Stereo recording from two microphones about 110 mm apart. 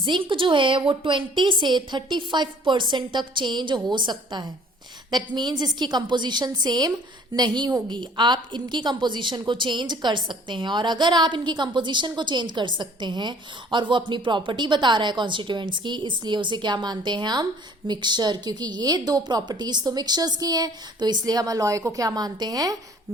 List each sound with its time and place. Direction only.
0.0 s a woman's voice: 45° right (ahead or behind)